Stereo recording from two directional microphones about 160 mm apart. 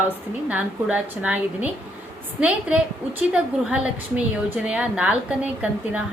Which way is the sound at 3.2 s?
5° right (ahead or behind).